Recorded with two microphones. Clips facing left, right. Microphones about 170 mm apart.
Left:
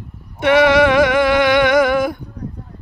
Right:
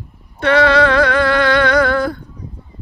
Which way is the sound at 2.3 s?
65° left (ahead or behind).